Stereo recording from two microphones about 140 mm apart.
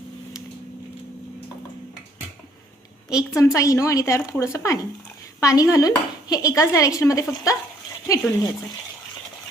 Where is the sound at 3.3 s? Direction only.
20° left (ahead or behind).